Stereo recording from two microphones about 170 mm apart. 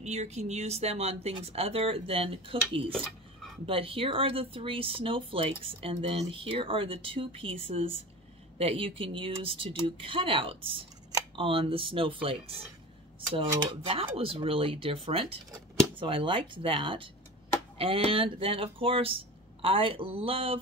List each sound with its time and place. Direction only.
0.0 s speech: 40° right (ahead or behind)
3.6 s speech: 30° right (ahead or behind)